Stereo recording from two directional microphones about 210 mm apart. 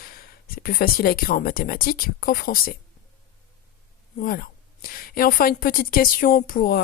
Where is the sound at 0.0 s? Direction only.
45° left (ahead or behind).